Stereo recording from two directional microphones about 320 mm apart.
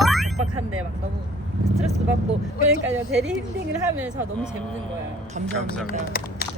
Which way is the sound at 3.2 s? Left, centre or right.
Centre.